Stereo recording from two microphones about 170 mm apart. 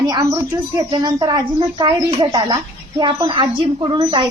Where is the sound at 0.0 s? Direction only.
25° right (ahead or behind).